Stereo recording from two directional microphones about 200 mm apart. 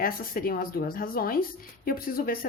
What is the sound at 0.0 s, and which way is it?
A woman's voice, 45° left (ahead or behind).